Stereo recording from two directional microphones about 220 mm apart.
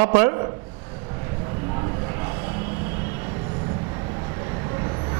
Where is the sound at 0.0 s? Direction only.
20° right (ahead or behind).